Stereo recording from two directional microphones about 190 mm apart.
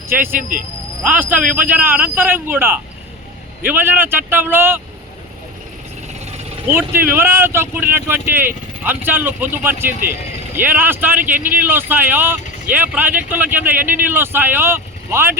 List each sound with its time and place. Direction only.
0.1 s speech: 10° right (ahead or behind)
6.7 s speech: 10° right (ahead or behind)